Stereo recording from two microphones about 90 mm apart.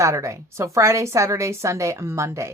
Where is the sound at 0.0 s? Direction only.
35° right (ahead or behind).